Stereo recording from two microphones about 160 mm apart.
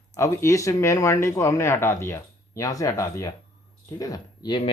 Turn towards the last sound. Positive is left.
turn(degrees=30)  # may be behind; listen again after turning